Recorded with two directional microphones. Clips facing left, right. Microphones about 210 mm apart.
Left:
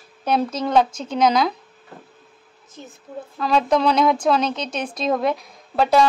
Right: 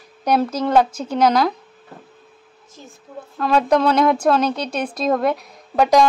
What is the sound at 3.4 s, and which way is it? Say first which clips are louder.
A woman's voice: right 2 dB; 10° right (ahead or behind).